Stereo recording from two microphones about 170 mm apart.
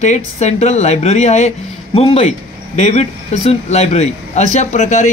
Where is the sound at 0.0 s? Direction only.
45° left (ahead or behind).